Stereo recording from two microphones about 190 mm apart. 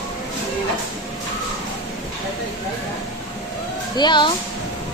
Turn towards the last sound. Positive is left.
turn(degrees=25)  # may be behind; listen again after turning